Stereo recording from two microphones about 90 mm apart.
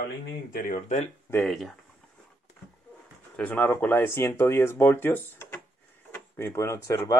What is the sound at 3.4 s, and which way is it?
Speech, 20° left (ahead or behind).